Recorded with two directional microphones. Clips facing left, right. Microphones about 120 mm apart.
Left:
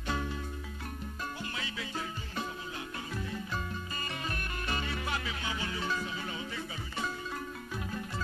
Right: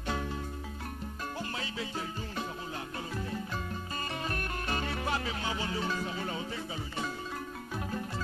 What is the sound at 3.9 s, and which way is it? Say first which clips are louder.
Music: right 5 dB; 35° right (ahead or behind).